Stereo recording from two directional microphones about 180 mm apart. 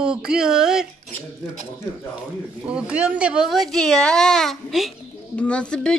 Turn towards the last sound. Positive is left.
turn(degrees=5)  # may be behind; listen again after turning